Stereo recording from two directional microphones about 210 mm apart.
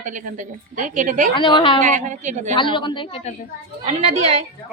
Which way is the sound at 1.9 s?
35° right (ahead or behind).